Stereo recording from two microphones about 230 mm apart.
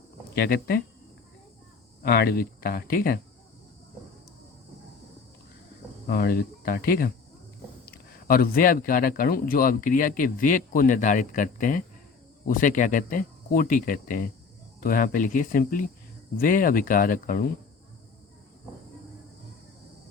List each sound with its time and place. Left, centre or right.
0.3 s speech: left
2.0 s speech: left
6.1 s speech: left